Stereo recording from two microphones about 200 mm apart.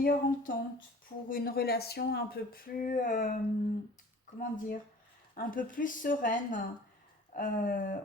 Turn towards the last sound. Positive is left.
turn(degrees=40)  # may be behind; listen again after turning